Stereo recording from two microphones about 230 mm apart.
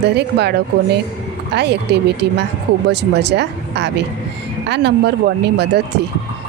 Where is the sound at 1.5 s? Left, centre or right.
Right.